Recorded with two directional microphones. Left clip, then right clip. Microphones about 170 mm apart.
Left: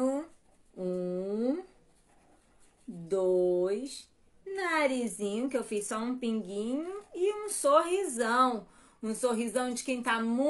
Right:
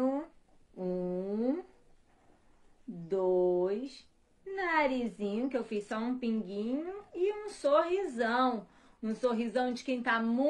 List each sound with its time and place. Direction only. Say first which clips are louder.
0.7 s humming: left 2 dB; 20° left (ahead or behind)
3.1 s a sound: left 2 dB; 20° left (ahead or behind)
4.5 s a woman's voice: left 1 dB; 20° left (ahead or behind)